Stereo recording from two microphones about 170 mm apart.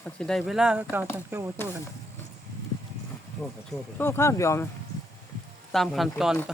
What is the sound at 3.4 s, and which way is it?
Speech, 15° left (ahead or behind).